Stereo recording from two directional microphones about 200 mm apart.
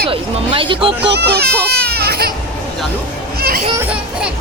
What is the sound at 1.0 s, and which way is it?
Speech, 55° right (ahead or behind).